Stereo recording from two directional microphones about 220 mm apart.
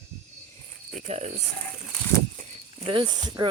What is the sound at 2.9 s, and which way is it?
Speech, 20° right (ahead or behind).